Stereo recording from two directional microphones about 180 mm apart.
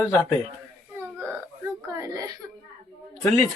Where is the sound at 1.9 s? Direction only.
20° right (ahead or behind).